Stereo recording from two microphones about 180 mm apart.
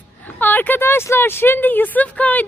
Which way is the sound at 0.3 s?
10° left (ahead or behind).